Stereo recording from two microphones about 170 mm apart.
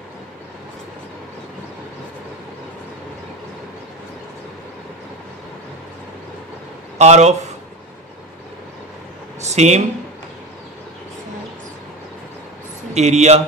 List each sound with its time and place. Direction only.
7.0 s a man's voice: 40° right (ahead or behind)
9.4 s a sound: 40° right (ahead or behind)
12.9 s speech: 40° right (ahead or behind)